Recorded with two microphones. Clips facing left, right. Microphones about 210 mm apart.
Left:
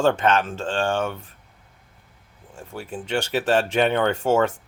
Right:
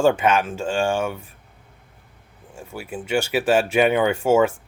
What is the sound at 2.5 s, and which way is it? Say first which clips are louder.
Speech: right 1 dB; 10° right (ahead or behind).